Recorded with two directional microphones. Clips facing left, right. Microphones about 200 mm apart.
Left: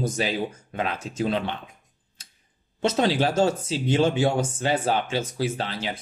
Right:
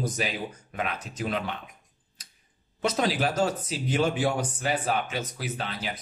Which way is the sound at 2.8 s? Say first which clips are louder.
Left 4 dB; 25° left (ahead or behind).